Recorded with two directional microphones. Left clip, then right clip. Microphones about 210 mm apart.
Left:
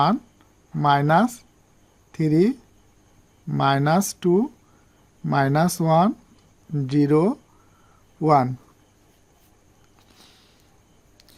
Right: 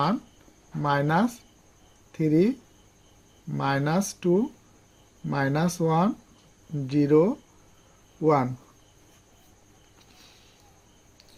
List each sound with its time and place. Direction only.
0.8 s speech: 55° left (ahead or behind)